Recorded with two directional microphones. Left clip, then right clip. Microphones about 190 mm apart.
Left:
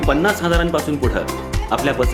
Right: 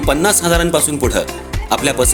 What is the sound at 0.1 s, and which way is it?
Speech, 40° right (ahead or behind).